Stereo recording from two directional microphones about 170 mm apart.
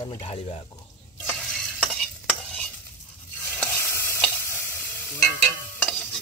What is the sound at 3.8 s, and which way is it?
Stir, 15° left (ahead or behind).